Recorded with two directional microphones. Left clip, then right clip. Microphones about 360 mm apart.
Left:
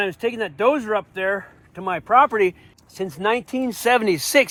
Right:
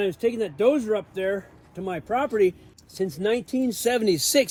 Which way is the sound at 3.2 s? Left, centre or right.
Left.